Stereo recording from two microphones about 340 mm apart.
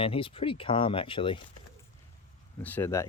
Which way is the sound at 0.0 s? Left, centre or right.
Centre.